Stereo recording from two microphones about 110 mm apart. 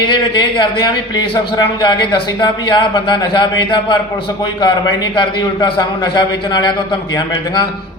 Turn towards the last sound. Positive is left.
turn(degrees=40)  # may be behind; listen again after turning